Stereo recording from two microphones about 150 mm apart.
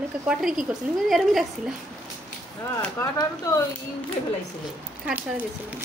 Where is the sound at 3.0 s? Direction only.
20° left (ahead or behind).